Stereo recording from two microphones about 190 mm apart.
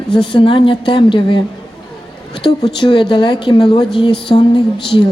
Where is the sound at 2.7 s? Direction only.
25° left (ahead or behind).